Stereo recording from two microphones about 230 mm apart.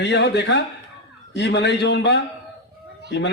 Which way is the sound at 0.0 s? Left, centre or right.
Left.